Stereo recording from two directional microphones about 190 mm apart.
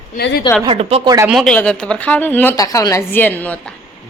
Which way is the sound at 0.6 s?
30° right (ahead or behind).